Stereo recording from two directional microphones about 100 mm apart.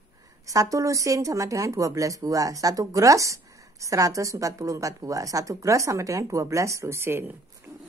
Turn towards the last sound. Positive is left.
turn(degrees=-20)  # may be behind; listen again after turning